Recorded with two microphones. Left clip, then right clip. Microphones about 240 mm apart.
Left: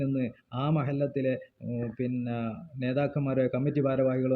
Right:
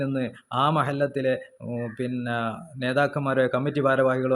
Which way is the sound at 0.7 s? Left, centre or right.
Right.